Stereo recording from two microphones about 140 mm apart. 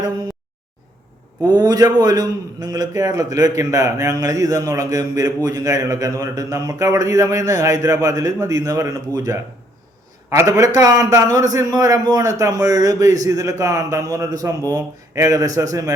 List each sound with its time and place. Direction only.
1.5 s speech: 30° right (ahead or behind)